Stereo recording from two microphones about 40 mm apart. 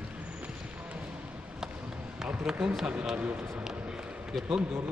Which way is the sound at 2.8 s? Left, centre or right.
Right.